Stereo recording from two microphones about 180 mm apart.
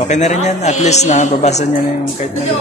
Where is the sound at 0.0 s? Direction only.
40° left (ahead or behind).